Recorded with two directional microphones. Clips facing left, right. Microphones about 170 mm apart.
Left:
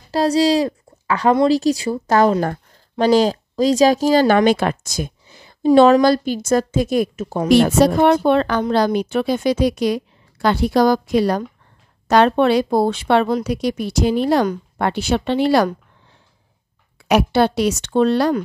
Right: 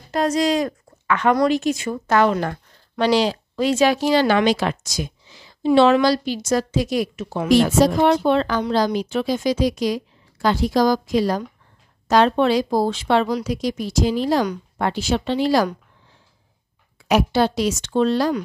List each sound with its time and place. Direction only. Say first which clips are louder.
0.1 s speech: left 4 dB; 30° left (ahead or behind); by 5.7 s 50° left (ahead or behind)
5.7 s a woman's voice: left 4 dB; 40° left (ahead or behind)
7.4 s a woman's voice: left 2 dB; 65° left (ahead or behind)
17.1 s a woman's voice: left 3 dB; 60° left (ahead or behind)